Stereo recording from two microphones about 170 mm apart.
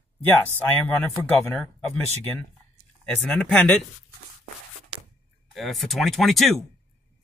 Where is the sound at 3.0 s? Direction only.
5° left (ahead or behind).